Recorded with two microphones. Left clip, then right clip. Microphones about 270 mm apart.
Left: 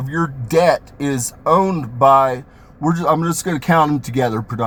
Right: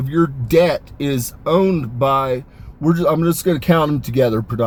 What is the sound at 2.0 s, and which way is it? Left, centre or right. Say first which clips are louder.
Speech: left 6 dB; left.